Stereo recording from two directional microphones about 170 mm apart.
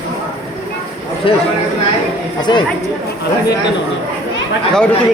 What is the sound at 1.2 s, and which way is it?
Speech, 30° left (ahead or behind).